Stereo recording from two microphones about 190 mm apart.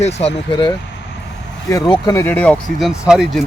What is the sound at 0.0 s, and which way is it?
Speech, 35° left (ahead or behind).